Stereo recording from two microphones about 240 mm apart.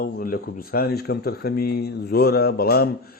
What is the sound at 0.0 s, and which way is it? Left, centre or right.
Speech, left.